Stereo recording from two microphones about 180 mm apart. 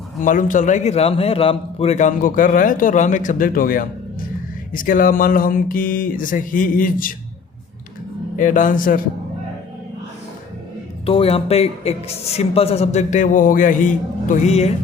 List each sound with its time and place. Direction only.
0.2 s a man's voice: 45° left (ahead or behind)
8.4 s a man's voice: 45° left (ahead or behind)
11.0 s a man's voice: 30° left (ahead or behind)